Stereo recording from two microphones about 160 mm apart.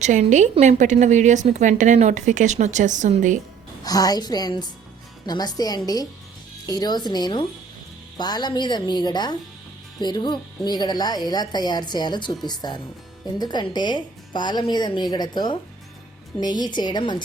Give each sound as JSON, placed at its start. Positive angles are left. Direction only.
{"t": 0.0, "sound": "a woman's voice", "side_deg": -50}
{"t": 3.8, "sound": "a woman's voice", "side_deg": 25}